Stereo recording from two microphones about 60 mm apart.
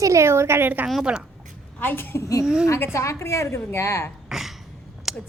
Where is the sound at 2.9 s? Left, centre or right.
Left.